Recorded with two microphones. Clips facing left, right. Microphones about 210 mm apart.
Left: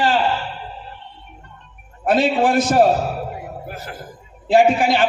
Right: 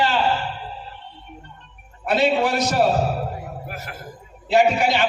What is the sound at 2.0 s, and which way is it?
Speech, 50° left (ahead or behind).